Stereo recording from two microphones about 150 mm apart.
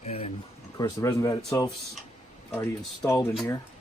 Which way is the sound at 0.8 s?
20° left (ahead or behind).